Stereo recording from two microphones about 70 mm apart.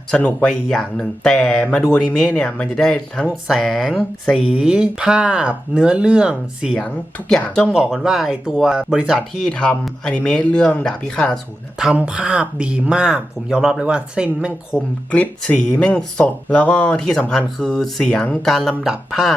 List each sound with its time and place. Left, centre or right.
0.1 s speech: centre
6.7 s speech: centre
7.7 s speech: centre
9.5 s speech: centre
11.9 s speech: centre
14.8 s speech: centre
18.7 s speech: centre